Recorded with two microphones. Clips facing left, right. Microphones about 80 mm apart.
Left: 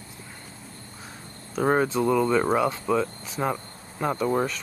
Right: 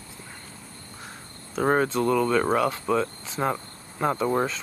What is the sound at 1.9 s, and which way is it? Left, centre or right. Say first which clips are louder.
Speech: left 1 dB; centre.